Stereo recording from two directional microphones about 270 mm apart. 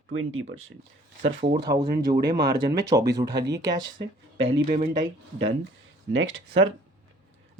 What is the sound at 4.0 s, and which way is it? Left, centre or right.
Speech, right.